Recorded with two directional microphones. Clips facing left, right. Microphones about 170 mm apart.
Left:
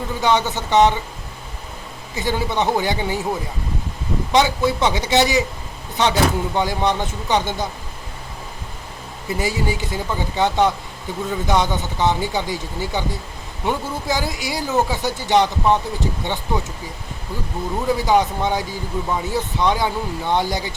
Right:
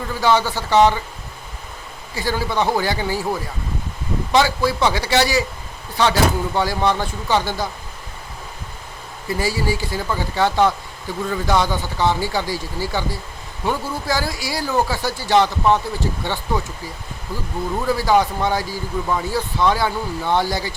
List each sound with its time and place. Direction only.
0.1 s speech: 20° left (ahead or behind)
2.1 s speech: 20° left (ahead or behind)
4.3 s speech: 20° left (ahead or behind)
9.4 s speech: 20° left (ahead or behind)
17.7 s speech: 20° left (ahead or behind)